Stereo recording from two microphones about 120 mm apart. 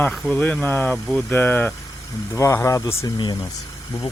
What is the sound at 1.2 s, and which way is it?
Speech, 15° left (ahead or behind).